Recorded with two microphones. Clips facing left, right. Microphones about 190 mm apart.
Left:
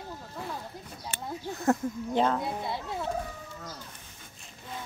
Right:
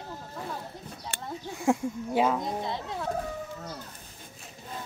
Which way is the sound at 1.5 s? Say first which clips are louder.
Right 1 dB; 10° right (ahead or behind).